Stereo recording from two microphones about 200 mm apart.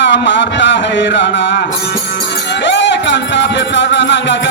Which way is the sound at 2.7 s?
65° left (ahead or behind).